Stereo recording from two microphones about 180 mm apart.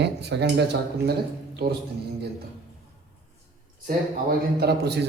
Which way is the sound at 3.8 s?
55° right (ahead or behind).